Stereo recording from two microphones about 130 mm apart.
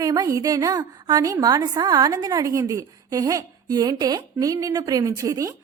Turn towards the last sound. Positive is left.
turn(degrees=-25)  # may be behind; listen again after turning